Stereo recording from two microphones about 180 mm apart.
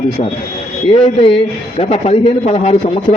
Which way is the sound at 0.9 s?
30° left (ahead or behind).